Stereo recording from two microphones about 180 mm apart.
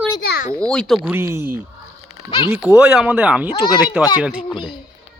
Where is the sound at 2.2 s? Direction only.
25° left (ahead or behind).